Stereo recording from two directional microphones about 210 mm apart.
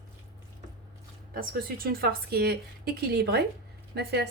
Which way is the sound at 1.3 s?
45° right (ahead or behind).